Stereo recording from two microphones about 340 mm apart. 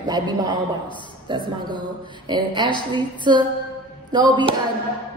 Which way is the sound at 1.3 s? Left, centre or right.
Centre.